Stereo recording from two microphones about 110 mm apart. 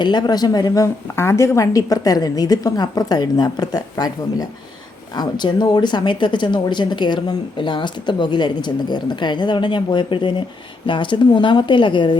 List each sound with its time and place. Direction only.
0.0 s a woman's voice: 40° left (ahead or behind)